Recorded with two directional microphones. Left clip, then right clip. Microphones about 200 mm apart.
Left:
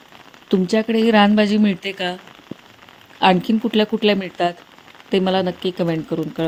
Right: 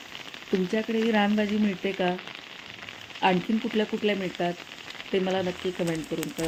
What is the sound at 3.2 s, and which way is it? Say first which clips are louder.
Speech: left 9 dB; 50° left (ahead or behind).